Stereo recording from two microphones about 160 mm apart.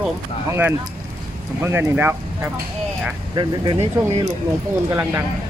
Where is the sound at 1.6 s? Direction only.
15° right (ahead or behind).